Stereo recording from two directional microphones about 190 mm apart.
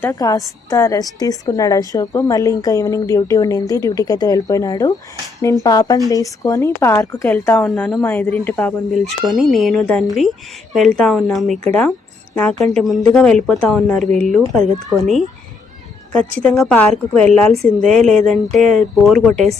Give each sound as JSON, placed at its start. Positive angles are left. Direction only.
{"t": 0.0, "sound": "a woman's voice", "side_deg": 15}
{"t": 16.4, "sound": "speech", "side_deg": 5}